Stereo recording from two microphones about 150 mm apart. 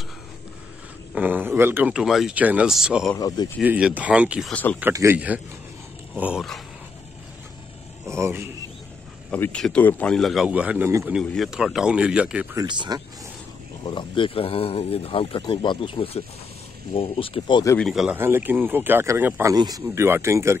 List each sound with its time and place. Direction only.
1.1 s speech: 10° right (ahead or behind)
3.2 s speech: 25° left (ahead or behind)
3.6 s speech: 10° right (ahead or behind)
4.5 s speech: 10° left (ahead or behind)
4.9 s speech: 15° right (ahead or behind)
8.1 s speech: 20° right (ahead or behind)
9.3 s speech: 10° left (ahead or behind); by 11.1 s 15° right (ahead or behind)
11.2 s speech: centre (ahead or behind)
12.5 s speech: 30° right (ahead or behind)
13.8 s speech: 35° left (ahead or behind)
17.7 s speech: centre (ahead or behind)
18.1 s speech: 15° right (ahead or behind)
19.5 s speech: 25° right (ahead or behind)